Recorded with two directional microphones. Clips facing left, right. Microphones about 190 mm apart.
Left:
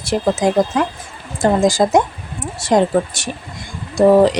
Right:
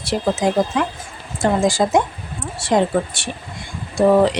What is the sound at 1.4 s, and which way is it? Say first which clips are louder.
A woman's voice: left 3 dB; 40° left (ahead or behind).